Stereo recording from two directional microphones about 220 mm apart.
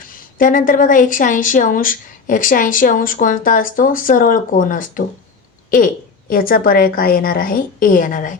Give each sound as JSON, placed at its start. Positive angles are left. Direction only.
{"t": 0.1, "sound": "speech", "side_deg": 40}